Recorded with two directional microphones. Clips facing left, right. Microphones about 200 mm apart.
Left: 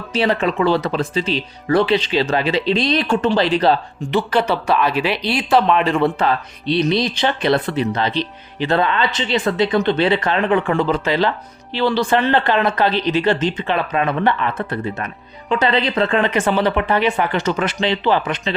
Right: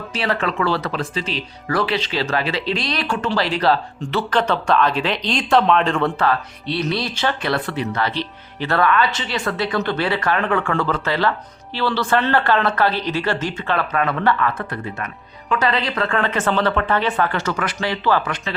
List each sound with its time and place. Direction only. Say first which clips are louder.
0.1 s speech: left 5 dB; 20° left (ahead or behind)